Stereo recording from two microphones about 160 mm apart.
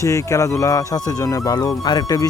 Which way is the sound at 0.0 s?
20° left (ahead or behind).